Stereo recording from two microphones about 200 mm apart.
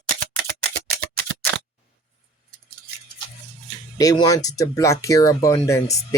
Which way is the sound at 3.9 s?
20° left (ahead or behind).